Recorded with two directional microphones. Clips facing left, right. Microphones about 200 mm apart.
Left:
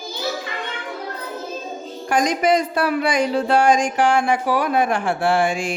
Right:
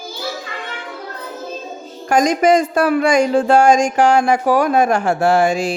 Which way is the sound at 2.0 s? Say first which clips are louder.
Right 5 dB; 45° right (ahead or behind).